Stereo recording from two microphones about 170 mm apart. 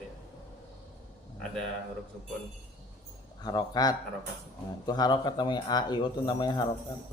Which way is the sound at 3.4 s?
25° left (ahead or behind).